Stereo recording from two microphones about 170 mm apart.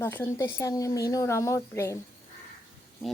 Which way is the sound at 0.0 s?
15° left (ahead or behind).